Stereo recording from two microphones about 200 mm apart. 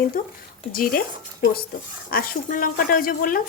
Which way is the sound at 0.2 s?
45° left (ahead or behind).